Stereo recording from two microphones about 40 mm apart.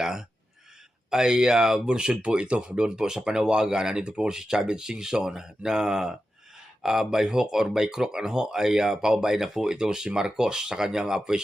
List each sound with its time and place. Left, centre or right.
0.0 s speech: centre
1.9 s speech: right